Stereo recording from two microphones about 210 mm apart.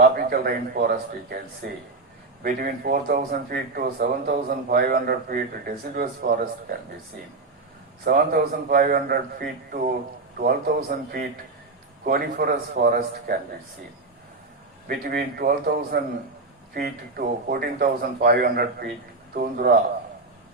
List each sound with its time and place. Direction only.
0.2 s speech: 45° right (ahead or behind)
8.0 s speech: 45° right (ahead or behind)
14.8 s speech: 45° right (ahead or behind)